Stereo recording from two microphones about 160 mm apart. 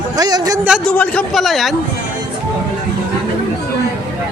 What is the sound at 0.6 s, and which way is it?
Speech, 5° right (ahead or behind).